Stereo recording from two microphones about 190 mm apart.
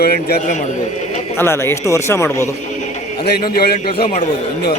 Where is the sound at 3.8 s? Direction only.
30° left (ahead or behind).